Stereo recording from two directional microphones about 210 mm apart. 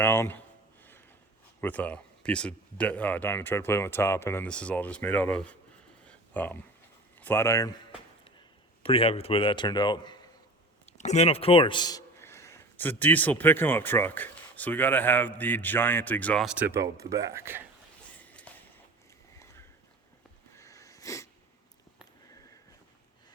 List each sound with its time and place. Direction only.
0.0 s speech: 10° left (ahead or behind)
1.6 s speech: 10° left (ahead or behind)
6.1 s a sound: 5° left (ahead or behind)
7.2 s speech: 10° left (ahead or behind)
8.8 s a man's voice: 25° left (ahead or behind)
10.9 s speech: 35° left (ahead or behind); by 17.6 s 10° right (ahead or behind)
18.2 s a sound: 5° left (ahead or behind)
20.5 s wheeze: 15° left (ahead or behind)